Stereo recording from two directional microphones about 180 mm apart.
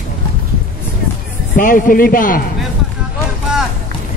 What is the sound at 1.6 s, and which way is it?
Speech, 50° left (ahead or behind).